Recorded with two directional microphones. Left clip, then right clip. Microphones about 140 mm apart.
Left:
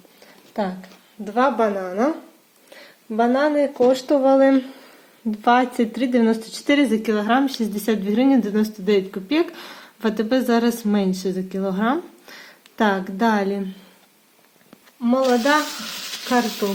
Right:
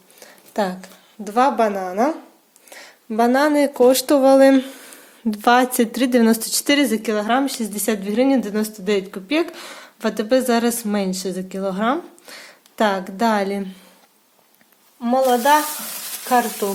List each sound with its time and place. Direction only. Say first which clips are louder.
1.2 s a woman's voice: right 2 dB; 40° right (ahead or behind)
1.5 s a woman's voice: right 2 dB; 20° right (ahead or behind)
3.2 s speech: right 2 dB; 50° right (ahead or behind)
6.7 s a woman's voice: even; 20° right (ahead or behind)
15.2 s a woman's voice: right 3 dB; 10° right (ahead or behind)
16.6 s a woman's voice: right 1 dB; 15° right (ahead or behind)